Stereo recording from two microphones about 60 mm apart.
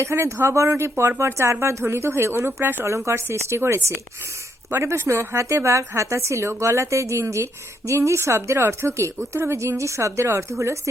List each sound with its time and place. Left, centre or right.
0.0 s speech: right